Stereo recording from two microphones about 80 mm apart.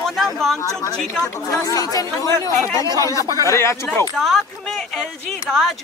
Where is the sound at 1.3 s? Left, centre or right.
Left.